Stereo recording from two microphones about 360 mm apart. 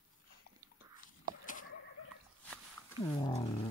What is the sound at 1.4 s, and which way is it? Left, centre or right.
Goat, left.